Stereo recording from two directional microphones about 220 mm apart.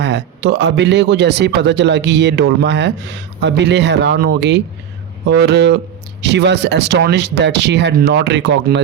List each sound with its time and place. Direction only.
0.0 s speech: 50° right (ahead or behind)